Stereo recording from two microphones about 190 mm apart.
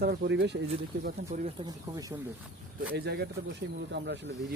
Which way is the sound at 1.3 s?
40° right (ahead or behind).